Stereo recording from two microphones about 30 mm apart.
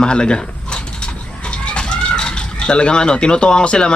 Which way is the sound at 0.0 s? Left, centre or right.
Left.